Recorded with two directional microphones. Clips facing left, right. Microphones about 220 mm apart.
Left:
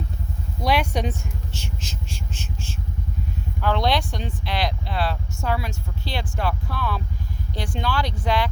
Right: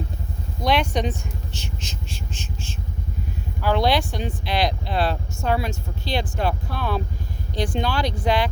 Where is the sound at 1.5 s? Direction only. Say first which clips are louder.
Even; 10° left (ahead or behind).